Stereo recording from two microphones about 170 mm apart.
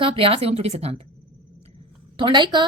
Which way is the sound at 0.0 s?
35° right (ahead or behind).